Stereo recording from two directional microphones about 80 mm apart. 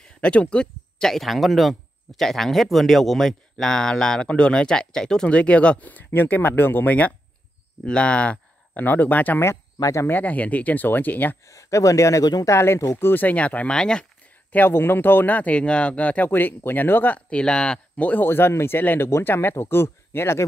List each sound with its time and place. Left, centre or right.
0.2 s speech: centre
9.8 s speech: left
10.0 s speech: left
11.4 s speech: left